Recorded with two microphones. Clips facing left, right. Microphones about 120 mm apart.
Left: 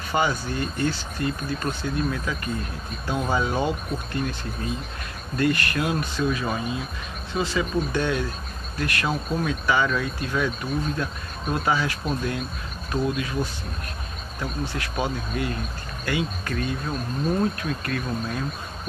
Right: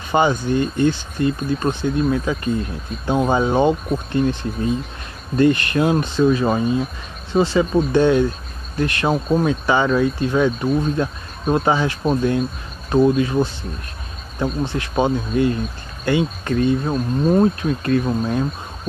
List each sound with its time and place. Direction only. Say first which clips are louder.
0.1 s speech: right 7 dB; 25° right (ahead or behind)